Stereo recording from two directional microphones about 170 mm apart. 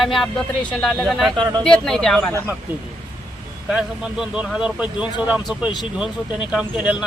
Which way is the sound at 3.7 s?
5° right (ahead or behind).